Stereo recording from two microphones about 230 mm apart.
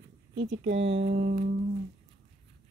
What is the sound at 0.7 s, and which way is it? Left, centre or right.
Music, right.